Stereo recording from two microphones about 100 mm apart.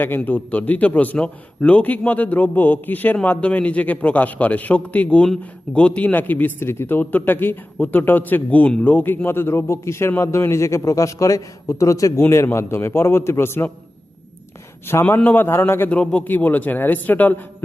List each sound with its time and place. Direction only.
0.0 s a man's voice: 20° left (ahead or behind)
15.1 s a man's voice: 20° left (ahead or behind)
16.0 s a man's voice: 10° left (ahead or behind)